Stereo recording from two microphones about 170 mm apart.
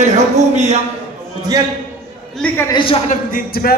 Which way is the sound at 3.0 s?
55° left (ahead or behind).